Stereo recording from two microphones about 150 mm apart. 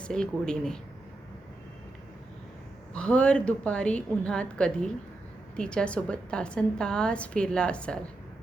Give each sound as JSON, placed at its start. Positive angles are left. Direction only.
{"t": 0.0, "sound": "speech", "side_deg": 5}
{"t": 2.9, "sound": "a woman's voice", "side_deg": 5}